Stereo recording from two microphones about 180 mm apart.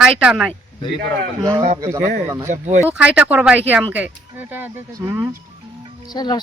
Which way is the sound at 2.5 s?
45° right (ahead or behind).